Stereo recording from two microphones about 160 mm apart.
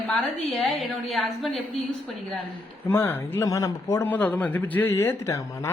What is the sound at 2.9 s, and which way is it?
Speech, 15° left (ahead or behind).